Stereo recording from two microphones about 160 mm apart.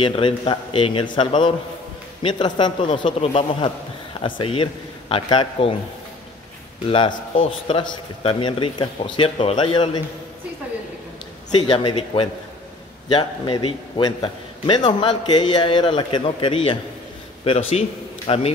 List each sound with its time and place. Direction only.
0.0 s a man's voice: 30° left (ahead or behind)
6.9 s a man's voice: 35° left (ahead or behind)
11.5 s a man's voice: 30° left (ahead or behind)